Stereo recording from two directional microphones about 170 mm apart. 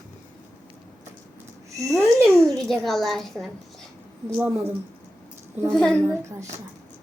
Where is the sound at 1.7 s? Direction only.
20° right (ahead or behind).